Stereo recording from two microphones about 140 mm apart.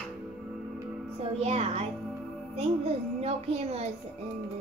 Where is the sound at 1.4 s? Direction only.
50° right (ahead or behind).